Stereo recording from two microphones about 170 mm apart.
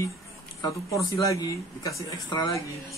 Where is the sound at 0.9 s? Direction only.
20° left (ahead or behind).